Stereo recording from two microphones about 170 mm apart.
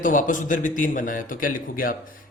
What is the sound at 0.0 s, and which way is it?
A man's voice, 50° left (ahead or behind).